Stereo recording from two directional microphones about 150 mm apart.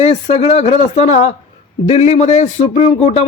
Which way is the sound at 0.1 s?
40° left (ahead or behind).